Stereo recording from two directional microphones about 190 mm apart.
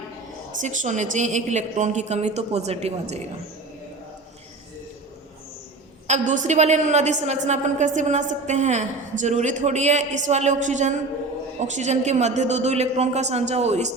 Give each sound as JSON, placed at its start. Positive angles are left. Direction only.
{"t": 0.6, "sound": "a woman's voice", "side_deg": -40}
{"t": 6.1, "sound": "a woman's voice", "side_deg": -40}